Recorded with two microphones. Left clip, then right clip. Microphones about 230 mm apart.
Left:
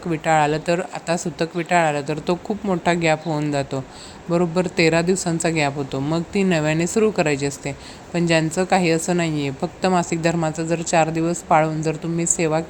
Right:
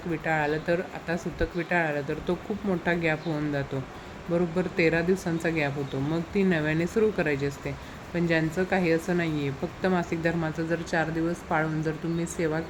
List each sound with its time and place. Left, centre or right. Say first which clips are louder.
0.1 s a woman's voice: left 9 dB; left